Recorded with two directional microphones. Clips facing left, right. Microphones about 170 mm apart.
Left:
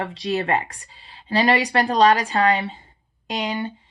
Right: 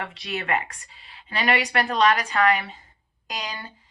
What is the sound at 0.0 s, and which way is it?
Speech, 35° left (ahead or behind).